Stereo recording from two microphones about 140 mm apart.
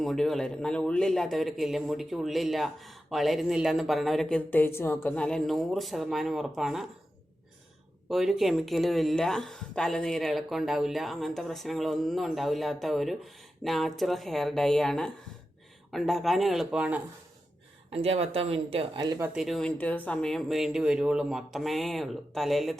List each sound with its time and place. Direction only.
0.0 s speech: centre (ahead or behind)
8.1 s speech: centre (ahead or behind)
17.9 s speech: 45° right (ahead or behind)
19.3 s speech: centre (ahead or behind)